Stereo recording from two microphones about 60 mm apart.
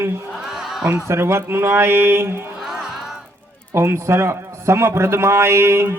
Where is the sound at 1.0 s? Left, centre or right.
Right.